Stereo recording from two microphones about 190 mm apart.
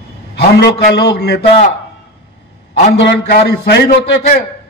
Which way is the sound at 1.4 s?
30° left (ahead or behind).